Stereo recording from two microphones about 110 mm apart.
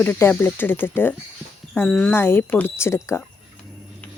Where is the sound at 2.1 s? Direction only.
20° left (ahead or behind).